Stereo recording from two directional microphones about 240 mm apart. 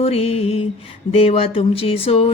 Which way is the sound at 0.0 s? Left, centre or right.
Left.